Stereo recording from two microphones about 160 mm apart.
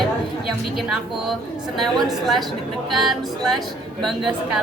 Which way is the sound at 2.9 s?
Centre (ahead or behind).